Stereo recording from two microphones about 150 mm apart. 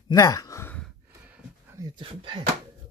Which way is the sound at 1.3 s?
20° right (ahead or behind).